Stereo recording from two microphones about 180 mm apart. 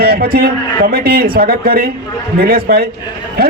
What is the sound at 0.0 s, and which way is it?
A man's voice, 55° right (ahead or behind).